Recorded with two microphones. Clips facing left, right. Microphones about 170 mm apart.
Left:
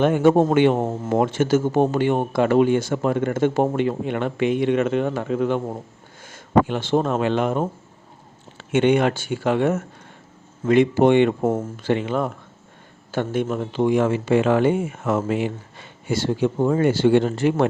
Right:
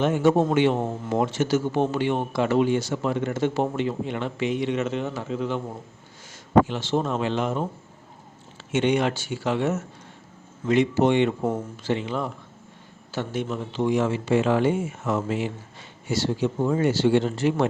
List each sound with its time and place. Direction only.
0.0 s speech: 55° left (ahead or behind)
6.7 s speech: 55° left (ahead or behind)
8.7 s speech: 55° left (ahead or behind)